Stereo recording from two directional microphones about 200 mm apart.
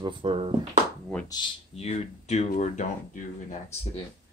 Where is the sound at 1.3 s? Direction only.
25° left (ahead or behind).